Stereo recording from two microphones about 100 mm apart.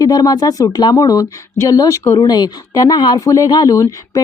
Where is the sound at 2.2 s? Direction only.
45° left (ahead or behind).